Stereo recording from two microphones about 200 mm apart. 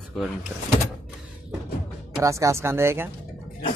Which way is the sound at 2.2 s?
15° right (ahead or behind).